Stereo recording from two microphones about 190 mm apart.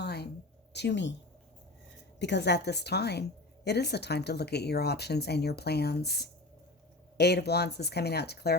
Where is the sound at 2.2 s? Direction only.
65° left (ahead or behind).